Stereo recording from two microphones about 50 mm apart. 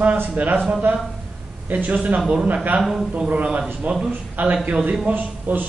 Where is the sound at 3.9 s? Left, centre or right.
Right.